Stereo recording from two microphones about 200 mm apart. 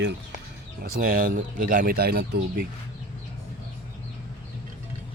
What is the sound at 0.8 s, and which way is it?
Speech, 45° right (ahead or behind).